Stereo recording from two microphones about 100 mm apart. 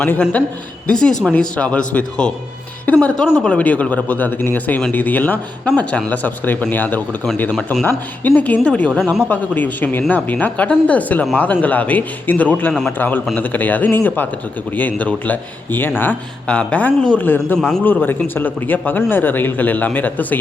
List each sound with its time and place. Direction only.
0.0 s speech: 20° left (ahead or behind)
0.9 s speech: 10° left (ahead or behind)
7.5 s a man's voice: centre (ahead or behind)
8.4 s speech: 15° left (ahead or behind)